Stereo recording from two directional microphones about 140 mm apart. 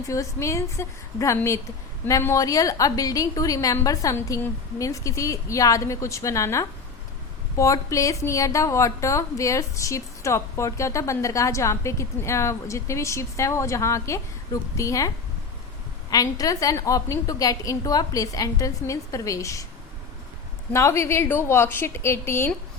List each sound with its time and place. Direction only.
0.1 s a woman's voice: 20° left (ahead or behind)
20.7 s a woman's voice: 20° left (ahead or behind)